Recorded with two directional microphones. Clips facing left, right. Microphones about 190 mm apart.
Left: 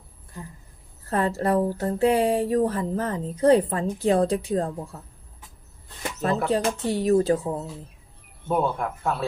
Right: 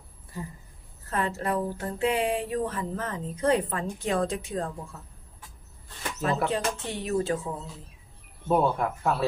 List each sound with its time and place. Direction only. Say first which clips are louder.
0.3 s speech: right 2 dB; 5° right (ahead or behind)
1.1 s speech: left 6 dB; 35° left (ahead or behind)
6.5 s speech: left 6 dB; 35° left (ahead or behind)
8.5 s speech: even; 5° right (ahead or behind)